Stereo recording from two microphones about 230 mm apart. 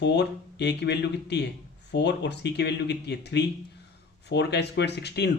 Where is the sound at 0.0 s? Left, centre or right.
Left.